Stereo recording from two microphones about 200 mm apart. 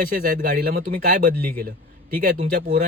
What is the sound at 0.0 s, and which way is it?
Speech, 45° right (ahead or behind).